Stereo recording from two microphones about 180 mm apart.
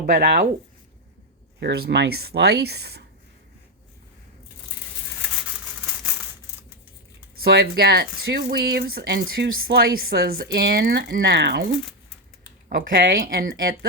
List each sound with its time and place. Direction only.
0.0 s speech: 50° right (ahead or behind)
1.5 s speech: 60° right (ahead or behind)
6.0 s a sound: 5° right (ahead or behind)
7.3 s speech: 60° right (ahead or behind)
9.2 s speech: 60° right (ahead or behind)
12.6 s speech: 55° right (ahead or behind)